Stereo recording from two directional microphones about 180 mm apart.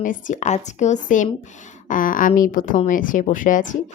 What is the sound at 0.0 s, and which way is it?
A woman's voice, 45° left (ahead or behind).